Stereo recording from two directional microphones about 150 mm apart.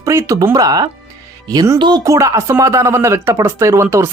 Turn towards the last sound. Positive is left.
turn(degrees=-20)  # may be behind; listen again after turning